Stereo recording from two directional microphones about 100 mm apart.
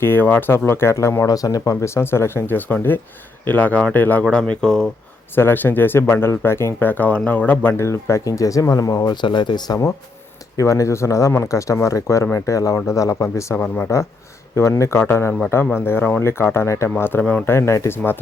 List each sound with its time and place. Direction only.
0.0 s speech: 20° left (ahead or behind)
5.3 s speech: 20° left (ahead or behind)
9.2 s speech: 50° left (ahead or behind)
10.6 s speech: 30° left (ahead or behind)
13.6 s speech: 15° left (ahead or behind)
14.5 s speech: 30° left (ahead or behind)